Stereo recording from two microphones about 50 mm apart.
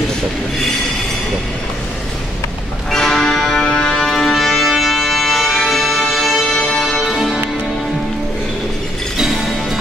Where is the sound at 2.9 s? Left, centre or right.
Centre.